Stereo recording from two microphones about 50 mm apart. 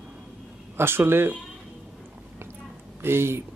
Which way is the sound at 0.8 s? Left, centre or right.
Right.